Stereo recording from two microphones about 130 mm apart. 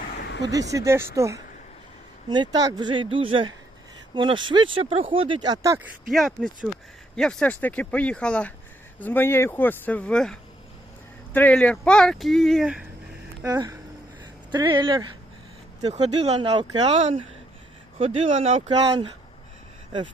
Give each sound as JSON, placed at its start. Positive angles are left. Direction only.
{"t": 0.4, "sound": "speech", "side_deg": -25}
{"t": 2.3, "sound": "speech", "side_deg": -35}
{"t": 6.1, "sound": "speech", "side_deg": 0}
{"t": 11.3, "sound": "speech", "side_deg": 10}
{"t": 13.4, "sound": "speech", "side_deg": -25}
{"t": 14.5, "sound": "speech", "side_deg": -35}
{"t": 15.9, "sound": "speech", "side_deg": -55}
{"t": 16.4, "sound": "speech", "side_deg": -35}
{"t": 16.8, "sound": "speech", "side_deg": -55}
{"t": 18.3, "sound": "speech", "side_deg": -70}
{"t": 18.8, "sound": "speech", "side_deg": -35}